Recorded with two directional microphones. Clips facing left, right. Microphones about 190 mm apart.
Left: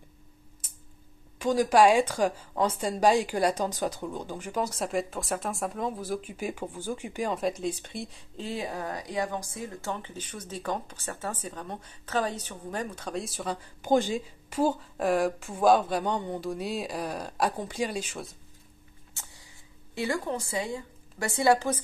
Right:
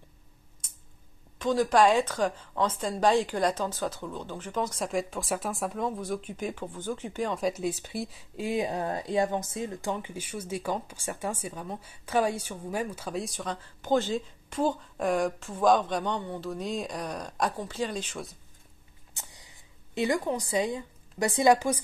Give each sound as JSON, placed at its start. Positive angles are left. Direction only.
{"t": 1.4, "sound": "speech", "side_deg": 10}
{"t": 7.3, "sound": "speech", "side_deg": 0}
{"t": 8.5, "sound": "a woman's voice", "side_deg": -20}
{"t": 13.6, "sound": "speech", "side_deg": 15}
{"t": 19.1, "sound": "a woman's voice", "side_deg": -20}